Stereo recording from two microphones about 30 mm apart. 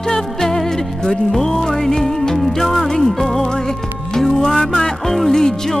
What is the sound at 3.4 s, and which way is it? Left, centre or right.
Music, left.